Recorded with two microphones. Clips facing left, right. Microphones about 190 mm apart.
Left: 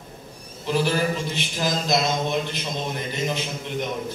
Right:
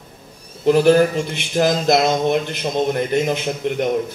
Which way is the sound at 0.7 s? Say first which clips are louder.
Right 10 dB; 55° right (ahead or behind).